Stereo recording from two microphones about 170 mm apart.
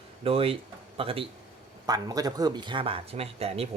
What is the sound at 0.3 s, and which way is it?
Speech, 35° right (ahead or behind).